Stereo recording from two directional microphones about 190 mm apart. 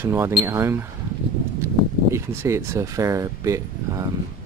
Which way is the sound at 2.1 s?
15° right (ahead or behind).